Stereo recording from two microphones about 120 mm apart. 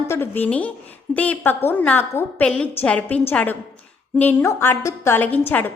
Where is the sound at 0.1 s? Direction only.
15° left (ahead or behind).